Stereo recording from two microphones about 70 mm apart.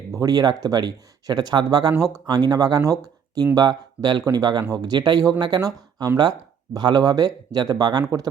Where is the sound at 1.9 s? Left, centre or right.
Right.